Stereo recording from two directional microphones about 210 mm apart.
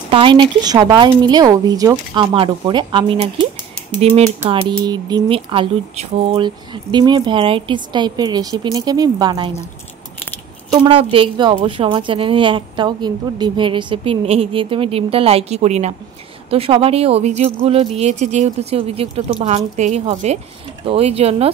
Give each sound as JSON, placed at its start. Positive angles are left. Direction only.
{"t": 0.1, "sound": "speech", "side_deg": -25}
{"t": 10.7, "sound": "speech", "side_deg": -25}